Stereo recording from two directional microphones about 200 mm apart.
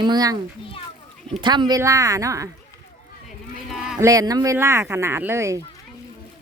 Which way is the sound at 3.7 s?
Centre (ahead or behind).